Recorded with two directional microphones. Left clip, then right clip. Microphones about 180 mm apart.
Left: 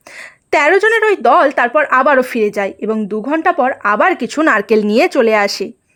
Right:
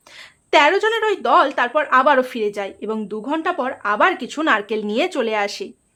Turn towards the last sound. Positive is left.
turn(degrees=40)  # may be behind; listen again after turning